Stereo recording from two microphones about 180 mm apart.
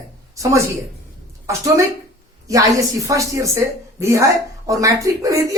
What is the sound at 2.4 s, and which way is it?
A woman's voice, 20° right (ahead or behind).